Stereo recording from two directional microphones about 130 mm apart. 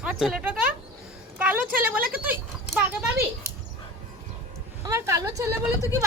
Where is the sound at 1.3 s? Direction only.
15° right (ahead or behind).